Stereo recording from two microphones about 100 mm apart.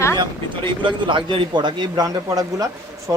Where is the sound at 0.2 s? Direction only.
50° right (ahead or behind).